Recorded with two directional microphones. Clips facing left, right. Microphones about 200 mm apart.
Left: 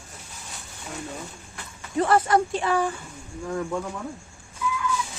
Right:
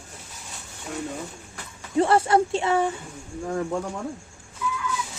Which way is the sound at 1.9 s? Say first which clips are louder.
Right 1 dB; 30° right (ahead or behind).